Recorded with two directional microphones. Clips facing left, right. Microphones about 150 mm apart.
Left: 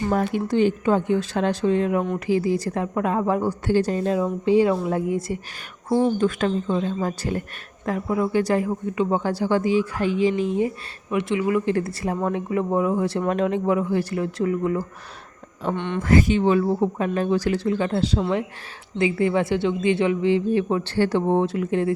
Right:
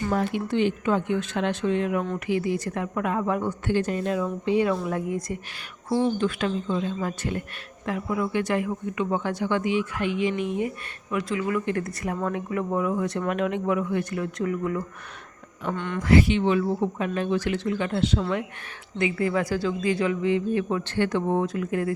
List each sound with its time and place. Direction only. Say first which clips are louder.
0.1 s a woman's voice: left 3 dB; 45° left (ahead or behind)
5.9 s a woman's voice: left 4 dB; 45° left (ahead or behind); by 16.0 s 25° left (ahead or behind)
16.0 s a woman's voice: left 1 dB; 45° left (ahead or behind); by 21.9 s 25° left (ahead or behind)